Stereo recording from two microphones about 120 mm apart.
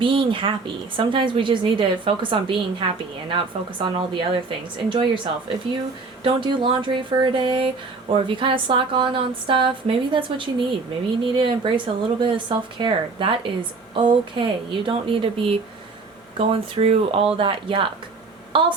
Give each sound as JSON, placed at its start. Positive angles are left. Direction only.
{"t": 0.0, "sound": "speech", "side_deg": -45}
{"t": 6.2, "sound": "speech", "side_deg": -45}